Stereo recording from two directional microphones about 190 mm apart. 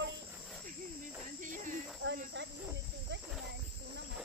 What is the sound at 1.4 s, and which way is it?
Speech, 45° right (ahead or behind).